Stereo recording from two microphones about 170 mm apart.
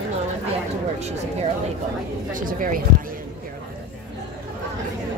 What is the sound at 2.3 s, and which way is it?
Speech, 55° right (ahead or behind).